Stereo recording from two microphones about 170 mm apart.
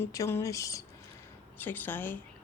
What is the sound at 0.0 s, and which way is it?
Speech, 15° left (ahead or behind).